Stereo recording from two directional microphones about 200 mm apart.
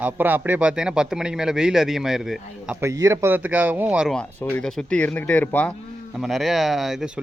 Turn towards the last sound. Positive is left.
turn(degrees=-5)  # may be behind; listen again after turning